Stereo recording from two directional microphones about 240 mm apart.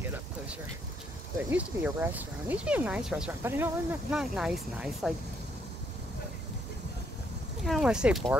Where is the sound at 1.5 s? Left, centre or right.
Centre.